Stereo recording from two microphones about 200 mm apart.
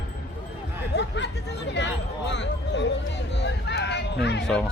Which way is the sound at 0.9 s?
60° left (ahead or behind).